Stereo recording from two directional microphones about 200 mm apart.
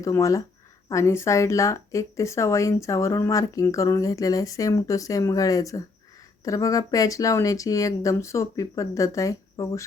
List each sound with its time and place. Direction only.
0.0 s speech: 15° left (ahead or behind)